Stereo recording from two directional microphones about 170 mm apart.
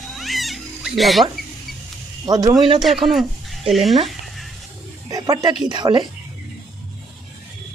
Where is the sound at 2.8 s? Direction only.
Centre (ahead or behind).